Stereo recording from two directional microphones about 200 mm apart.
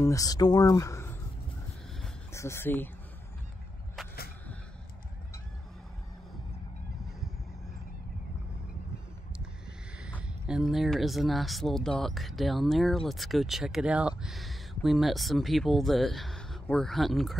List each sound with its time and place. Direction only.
0.0 s speech: 15° left (ahead or behind)
2.3 s speech: 15° left (ahead or behind)
10.4 s speech: 5° right (ahead or behind)